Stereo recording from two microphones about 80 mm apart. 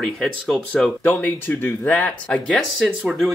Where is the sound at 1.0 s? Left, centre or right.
Left.